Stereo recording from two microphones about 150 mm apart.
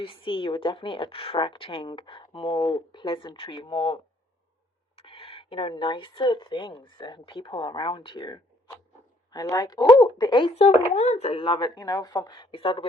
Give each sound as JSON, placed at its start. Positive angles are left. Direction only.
{"t": 0.0, "sound": "speech", "side_deg": 35}
{"t": 10.5, "sound": "speech", "side_deg": 45}